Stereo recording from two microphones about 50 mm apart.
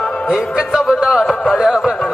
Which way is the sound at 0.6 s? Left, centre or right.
Centre.